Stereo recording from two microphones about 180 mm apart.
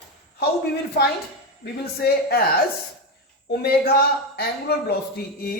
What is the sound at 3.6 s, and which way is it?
Speech, 55° left (ahead or behind).